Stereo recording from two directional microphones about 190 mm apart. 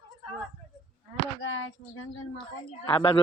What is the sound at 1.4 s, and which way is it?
Speech, 90° left.